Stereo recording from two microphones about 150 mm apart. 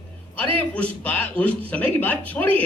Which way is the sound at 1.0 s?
10° left (ahead or behind).